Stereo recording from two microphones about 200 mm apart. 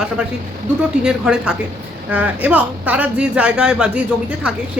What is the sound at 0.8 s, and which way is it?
A woman's voice, 5° right (ahead or behind).